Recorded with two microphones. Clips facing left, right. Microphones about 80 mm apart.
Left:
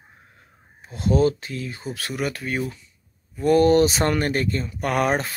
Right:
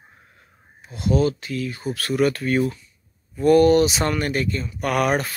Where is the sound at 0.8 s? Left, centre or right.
Left; by 2.6 s centre.